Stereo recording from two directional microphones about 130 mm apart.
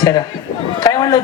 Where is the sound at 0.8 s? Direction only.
30° left (ahead or behind).